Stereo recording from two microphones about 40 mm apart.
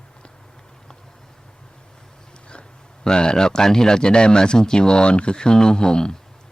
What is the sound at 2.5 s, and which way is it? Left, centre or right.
A man's voice, left.